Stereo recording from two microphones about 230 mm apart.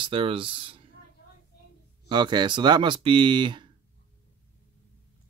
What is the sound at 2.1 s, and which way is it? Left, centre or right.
Speech, centre.